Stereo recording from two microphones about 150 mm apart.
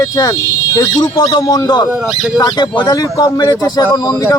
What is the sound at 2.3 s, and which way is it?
Speech, 25° left (ahead or behind).